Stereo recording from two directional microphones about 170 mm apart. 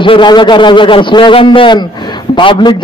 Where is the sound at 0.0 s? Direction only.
30° left (ahead or behind).